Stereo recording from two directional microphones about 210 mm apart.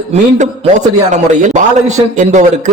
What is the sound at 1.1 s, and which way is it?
A man's voice, 35° right (ahead or behind).